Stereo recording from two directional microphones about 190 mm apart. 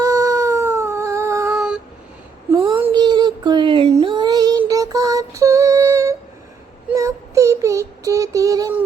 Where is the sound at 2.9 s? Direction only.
20° right (ahead or behind).